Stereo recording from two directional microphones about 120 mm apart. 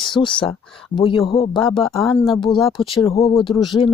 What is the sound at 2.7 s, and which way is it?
Speech, 45° left (ahead or behind).